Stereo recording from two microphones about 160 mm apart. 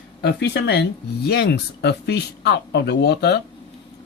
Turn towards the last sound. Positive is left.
turn(degrees=90)